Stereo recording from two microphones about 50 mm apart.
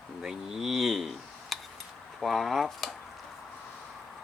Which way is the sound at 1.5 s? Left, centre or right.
Centre.